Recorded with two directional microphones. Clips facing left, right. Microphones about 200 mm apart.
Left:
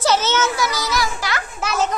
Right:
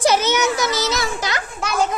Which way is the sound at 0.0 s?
15° right (ahead or behind).